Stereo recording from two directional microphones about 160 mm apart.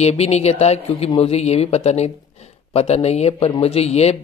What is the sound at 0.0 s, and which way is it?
Speech, 40° left (ahead or behind).